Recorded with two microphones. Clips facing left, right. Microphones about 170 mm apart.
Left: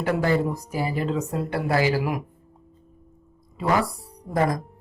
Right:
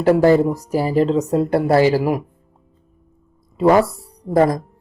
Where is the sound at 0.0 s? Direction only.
40° right (ahead or behind).